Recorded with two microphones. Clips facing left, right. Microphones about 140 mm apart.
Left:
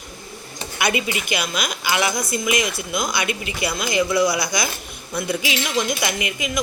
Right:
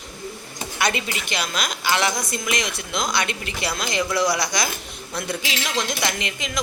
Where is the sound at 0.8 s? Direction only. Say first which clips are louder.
Left 2 dB; 10° left (ahead or behind).